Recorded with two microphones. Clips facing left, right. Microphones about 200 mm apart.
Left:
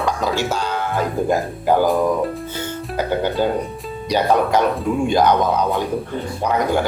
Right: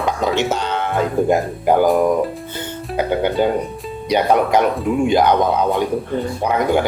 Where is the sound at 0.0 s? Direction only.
20° right (ahead or behind).